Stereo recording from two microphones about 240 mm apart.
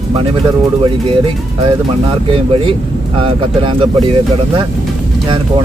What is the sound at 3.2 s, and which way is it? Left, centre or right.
Speech, right.